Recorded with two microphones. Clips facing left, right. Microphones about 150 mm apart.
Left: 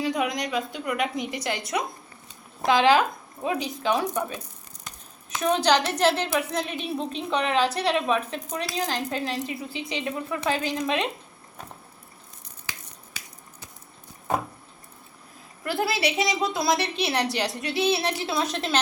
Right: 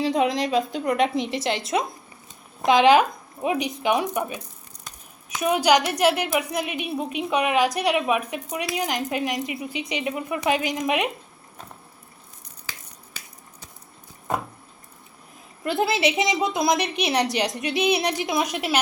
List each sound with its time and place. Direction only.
0.0 s a woman's voice: 25° right (ahead or behind)
15.6 s a woman's voice: 20° right (ahead or behind)